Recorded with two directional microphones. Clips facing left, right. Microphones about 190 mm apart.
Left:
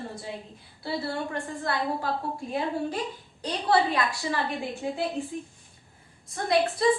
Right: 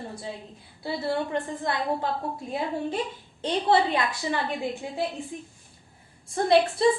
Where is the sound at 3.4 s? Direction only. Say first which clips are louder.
Right 2 dB; 25° right (ahead or behind).